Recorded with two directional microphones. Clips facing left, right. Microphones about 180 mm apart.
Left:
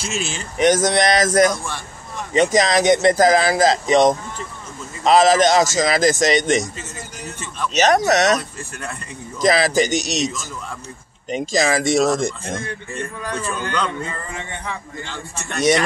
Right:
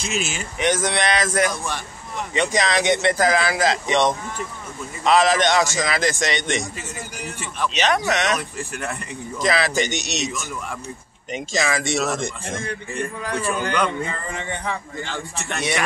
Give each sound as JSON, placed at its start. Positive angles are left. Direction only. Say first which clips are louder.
{"t": 0.1, "sound": "speech", "louder": "right 1 dB", "side_deg": 35}
{"t": 7.7, "sound": "speech", "louder": "left 7 dB", "side_deg": 40}
{"t": 8.5, "sound": "a man's voice", "louder": "right 3 dB", "side_deg": -15}
{"t": 9.4, "sound": "speech", "louder": "left 5 dB", "side_deg": 40}
{"t": 12.9, "sound": "a man's voice", "louder": "right 1 dB", "side_deg": -15}